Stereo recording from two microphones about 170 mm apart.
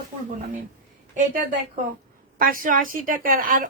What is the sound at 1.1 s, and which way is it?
Speech, 50° right (ahead or behind).